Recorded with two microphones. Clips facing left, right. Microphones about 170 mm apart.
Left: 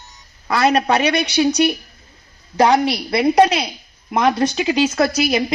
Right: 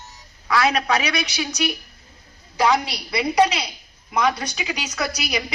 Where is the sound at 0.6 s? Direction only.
50° left (ahead or behind).